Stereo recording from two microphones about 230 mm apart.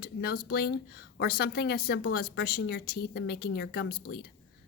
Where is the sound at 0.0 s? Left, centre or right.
Left.